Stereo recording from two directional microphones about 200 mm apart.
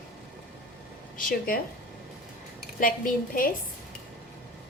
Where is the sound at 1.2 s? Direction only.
45° left (ahead or behind).